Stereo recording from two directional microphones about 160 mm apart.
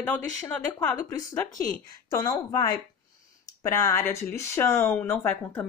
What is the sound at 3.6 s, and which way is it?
Speech, 15° left (ahead or behind).